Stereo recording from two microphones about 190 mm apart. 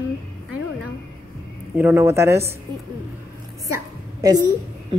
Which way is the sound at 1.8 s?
15° right (ahead or behind).